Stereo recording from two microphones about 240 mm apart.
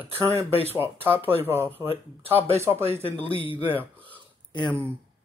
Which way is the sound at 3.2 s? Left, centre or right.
Left.